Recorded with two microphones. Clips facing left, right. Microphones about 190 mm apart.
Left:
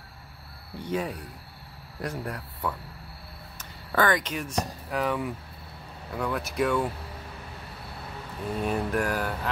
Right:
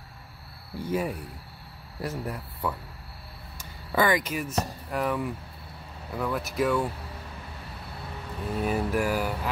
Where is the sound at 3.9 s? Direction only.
10° right (ahead or behind).